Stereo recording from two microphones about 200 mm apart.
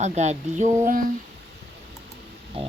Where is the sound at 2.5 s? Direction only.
30° right (ahead or behind).